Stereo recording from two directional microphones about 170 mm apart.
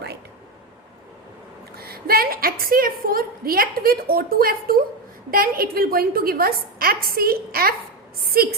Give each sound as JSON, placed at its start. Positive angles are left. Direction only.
{"t": 1.7, "sound": "a woman's voice", "side_deg": -65}